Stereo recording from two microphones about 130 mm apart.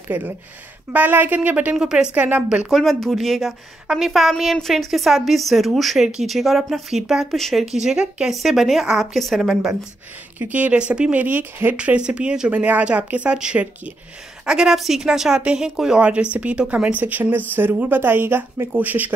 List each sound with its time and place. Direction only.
0.1 s speech: 15° right (ahead or behind)
2.7 s a woman's voice: centre (ahead or behind)